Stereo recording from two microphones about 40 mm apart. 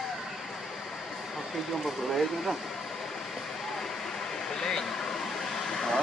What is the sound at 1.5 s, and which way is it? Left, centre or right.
Speech, centre.